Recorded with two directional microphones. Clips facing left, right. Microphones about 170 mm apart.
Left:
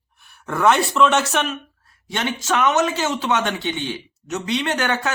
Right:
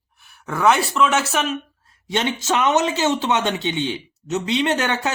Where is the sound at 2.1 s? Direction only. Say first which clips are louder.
Right 2 dB; 20° right (ahead or behind).